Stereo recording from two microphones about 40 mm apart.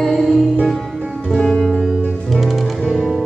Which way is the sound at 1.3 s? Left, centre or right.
Centre.